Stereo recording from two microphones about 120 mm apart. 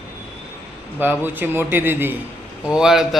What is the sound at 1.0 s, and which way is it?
A man's voice, 15° right (ahead or behind).